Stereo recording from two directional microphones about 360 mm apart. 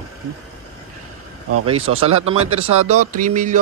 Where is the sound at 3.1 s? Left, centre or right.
Right.